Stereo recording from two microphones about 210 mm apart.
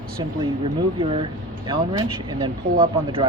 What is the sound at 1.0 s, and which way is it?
Speech, 25° right (ahead or behind).